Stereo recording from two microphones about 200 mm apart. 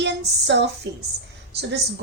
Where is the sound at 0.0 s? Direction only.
60° right (ahead or behind).